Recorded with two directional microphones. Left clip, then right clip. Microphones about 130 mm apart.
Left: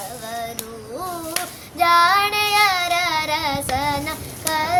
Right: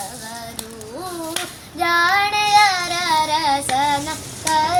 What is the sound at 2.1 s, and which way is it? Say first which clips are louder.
Child singing: right 3 dB; 5° right (ahead or behind).